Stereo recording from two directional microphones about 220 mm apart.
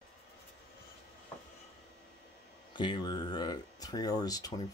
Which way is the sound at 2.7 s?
20° left (ahead or behind).